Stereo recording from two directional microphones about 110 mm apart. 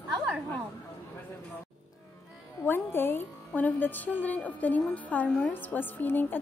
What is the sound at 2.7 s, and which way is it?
A woman's voice, 20° left (ahead or behind).